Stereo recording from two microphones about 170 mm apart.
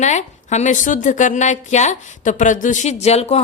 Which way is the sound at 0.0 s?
45° left (ahead or behind).